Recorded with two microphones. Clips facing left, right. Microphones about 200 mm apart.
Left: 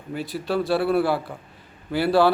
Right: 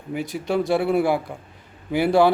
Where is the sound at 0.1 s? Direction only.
20° right (ahead or behind).